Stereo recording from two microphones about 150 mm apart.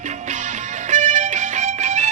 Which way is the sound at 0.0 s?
55° right (ahead or behind).